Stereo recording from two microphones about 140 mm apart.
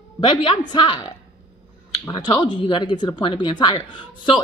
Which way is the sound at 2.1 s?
35° left (ahead or behind).